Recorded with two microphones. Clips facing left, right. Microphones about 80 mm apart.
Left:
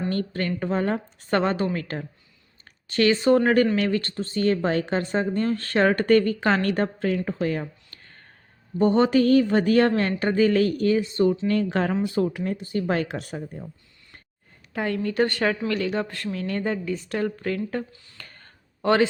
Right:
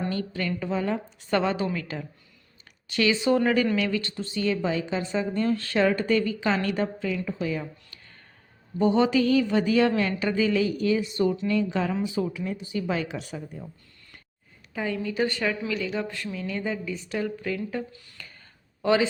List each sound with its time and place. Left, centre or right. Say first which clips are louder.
0.1 s a woman's voice: left 3 dB; left
6.0 s a woman's voice: left 5 dB; left
7.9 s a sound: left 1 dB; left
8.8 s a woman's voice: left 3 dB; left
11.4 s a woman's voice: left 2 dB; left
14.7 s a woman's voice: left 3 dB; left
17.1 s a sound: left 2 dB; left